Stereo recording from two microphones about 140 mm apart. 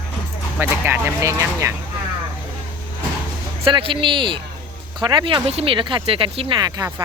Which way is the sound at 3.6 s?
40° right (ahead or behind).